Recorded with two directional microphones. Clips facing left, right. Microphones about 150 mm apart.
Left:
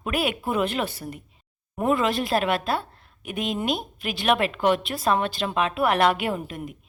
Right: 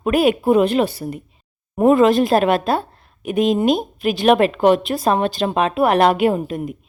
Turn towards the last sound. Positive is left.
turn(degrees=-35)  # may be behind; listen again after turning